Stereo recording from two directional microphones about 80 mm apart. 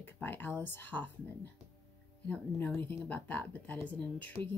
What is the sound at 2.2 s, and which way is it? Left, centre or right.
Speech, centre.